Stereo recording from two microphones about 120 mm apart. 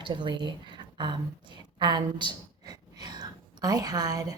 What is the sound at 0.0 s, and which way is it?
Speech, 40° right (ahead or behind).